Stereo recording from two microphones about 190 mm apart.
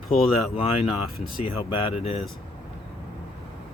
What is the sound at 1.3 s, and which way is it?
Speech, 25° left (ahead or behind).